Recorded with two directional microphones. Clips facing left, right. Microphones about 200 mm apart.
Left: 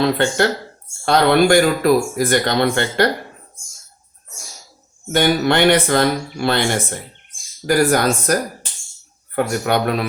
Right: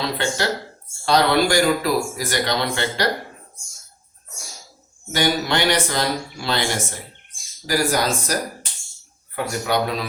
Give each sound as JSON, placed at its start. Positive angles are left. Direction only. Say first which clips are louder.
{"t": 0.0, "sound": "speech", "louder": "left 7 dB", "side_deg": 55}
{"t": 5.1, "sound": "speech", "louder": "left 5 dB", "side_deg": 55}